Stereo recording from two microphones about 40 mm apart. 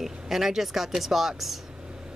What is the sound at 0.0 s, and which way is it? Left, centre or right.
Speech, centre.